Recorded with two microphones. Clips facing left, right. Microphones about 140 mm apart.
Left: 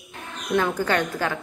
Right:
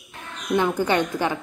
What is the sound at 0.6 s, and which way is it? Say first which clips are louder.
Speech: right 2 dB; 15° right (ahead or behind).